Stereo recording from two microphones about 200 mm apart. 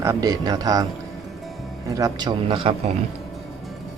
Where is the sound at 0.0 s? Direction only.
15° right (ahead or behind).